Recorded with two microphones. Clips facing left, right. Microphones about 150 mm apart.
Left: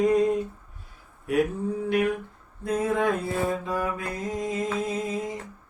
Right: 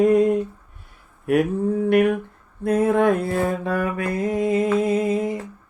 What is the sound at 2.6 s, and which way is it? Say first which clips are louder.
Mantra: right 7 dB; 60° right (ahead or behind).